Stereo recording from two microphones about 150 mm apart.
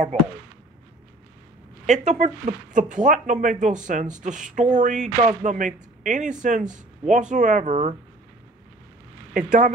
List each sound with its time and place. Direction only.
1.9 s speech: 55° right (ahead or behind)
9.3 s speech: 70° right (ahead or behind)